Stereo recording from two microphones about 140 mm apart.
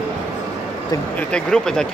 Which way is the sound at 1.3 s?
5° left (ahead or behind).